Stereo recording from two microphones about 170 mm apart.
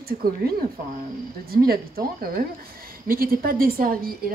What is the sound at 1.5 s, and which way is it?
A woman's voice, 60° right (ahead or behind).